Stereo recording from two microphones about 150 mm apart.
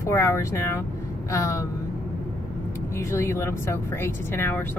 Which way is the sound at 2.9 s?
20° left (ahead or behind).